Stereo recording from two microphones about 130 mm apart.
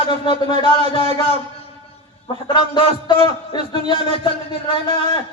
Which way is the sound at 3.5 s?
35° left (ahead or behind).